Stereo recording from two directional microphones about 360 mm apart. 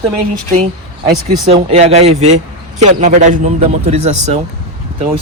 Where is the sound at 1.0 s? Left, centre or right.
Centre.